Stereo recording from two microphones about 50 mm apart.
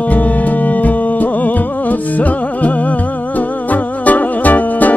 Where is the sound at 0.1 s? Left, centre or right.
Left.